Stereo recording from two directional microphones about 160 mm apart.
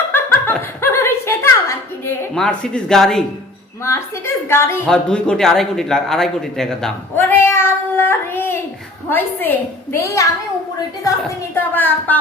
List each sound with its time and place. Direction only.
0.1 s chuckle: 15° left (ahead or behind)
2.3 s a woman's voice: 5° left (ahead or behind)
3.9 s a woman's voice: 15° left (ahead or behind)
7.2 s child singing: 15° left (ahead or behind)
9.0 s a woman's voice: 10° left (ahead or behind)
11.5 s a woman's voice: 10° left (ahead or behind)